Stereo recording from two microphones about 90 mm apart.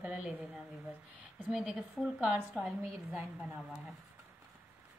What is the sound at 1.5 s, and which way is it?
A woman's voice, 10° right (ahead or behind).